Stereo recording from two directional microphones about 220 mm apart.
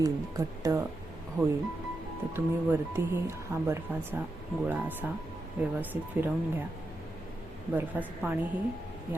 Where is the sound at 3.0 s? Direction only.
10° right (ahead or behind).